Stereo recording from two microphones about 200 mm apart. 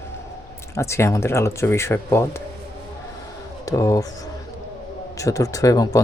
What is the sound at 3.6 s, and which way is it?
Speech, 15° left (ahead or behind).